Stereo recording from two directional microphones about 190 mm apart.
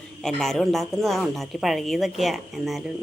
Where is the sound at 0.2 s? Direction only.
Centre (ahead or behind).